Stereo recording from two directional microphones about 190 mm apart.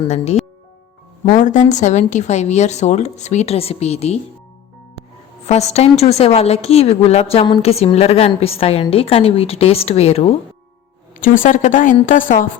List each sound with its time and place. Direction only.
1.3 s a woman's voice: 45° left (ahead or behind)
5.5 s a woman's voice: 35° left (ahead or behind)
11.2 s a woman's voice: 45° left (ahead or behind)